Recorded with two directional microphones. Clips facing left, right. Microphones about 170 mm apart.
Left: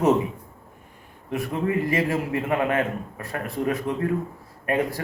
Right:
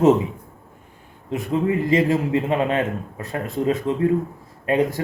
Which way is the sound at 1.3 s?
20° right (ahead or behind).